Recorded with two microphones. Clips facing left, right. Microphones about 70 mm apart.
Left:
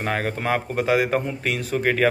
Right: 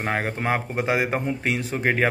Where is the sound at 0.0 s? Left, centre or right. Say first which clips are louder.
Left 1 dB; right.